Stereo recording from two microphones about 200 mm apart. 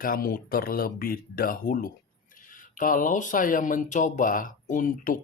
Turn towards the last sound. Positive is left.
turn(degrees=40)  # may be behind; listen again after turning